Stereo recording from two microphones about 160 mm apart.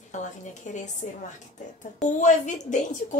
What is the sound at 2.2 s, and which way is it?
Speech, 50° left (ahead or behind).